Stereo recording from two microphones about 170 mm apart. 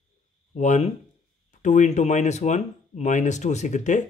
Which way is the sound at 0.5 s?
45° left (ahead or behind).